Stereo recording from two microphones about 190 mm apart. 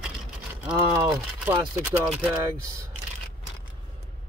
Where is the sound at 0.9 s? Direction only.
10° right (ahead or behind).